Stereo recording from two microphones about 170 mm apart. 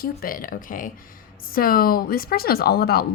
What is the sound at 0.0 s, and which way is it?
Speech, 60° left (ahead or behind).